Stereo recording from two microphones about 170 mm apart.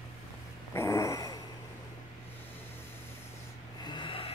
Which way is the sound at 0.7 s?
15° left (ahead or behind).